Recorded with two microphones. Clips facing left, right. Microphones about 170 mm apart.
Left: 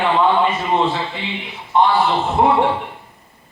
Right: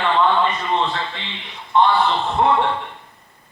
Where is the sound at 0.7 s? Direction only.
15° left (ahead or behind).